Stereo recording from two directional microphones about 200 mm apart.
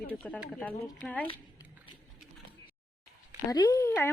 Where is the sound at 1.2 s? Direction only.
25° left (ahead or behind).